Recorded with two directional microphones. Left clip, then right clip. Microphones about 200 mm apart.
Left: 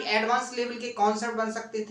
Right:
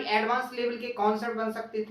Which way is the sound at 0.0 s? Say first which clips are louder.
Left 1 dB; 10° left (ahead or behind).